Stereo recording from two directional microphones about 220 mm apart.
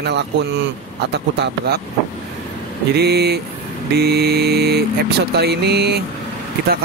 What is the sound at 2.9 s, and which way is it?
Speech, 50° right (ahead or behind).